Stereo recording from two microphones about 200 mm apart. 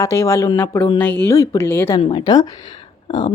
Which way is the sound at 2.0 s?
25° left (ahead or behind).